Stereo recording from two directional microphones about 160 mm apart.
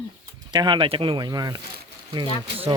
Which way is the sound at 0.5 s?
30° right (ahead or behind).